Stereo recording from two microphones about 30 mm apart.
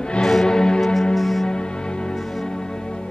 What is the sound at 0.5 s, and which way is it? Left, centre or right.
Music, left.